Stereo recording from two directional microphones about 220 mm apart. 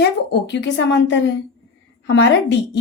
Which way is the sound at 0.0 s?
50° left (ahead or behind).